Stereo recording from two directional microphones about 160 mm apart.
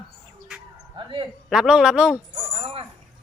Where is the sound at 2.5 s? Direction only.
35° right (ahead or behind).